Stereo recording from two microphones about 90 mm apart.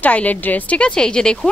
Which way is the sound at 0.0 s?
15° left (ahead or behind).